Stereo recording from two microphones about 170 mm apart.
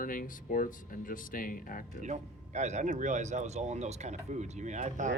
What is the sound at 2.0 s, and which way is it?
Speech, 45° right (ahead or behind).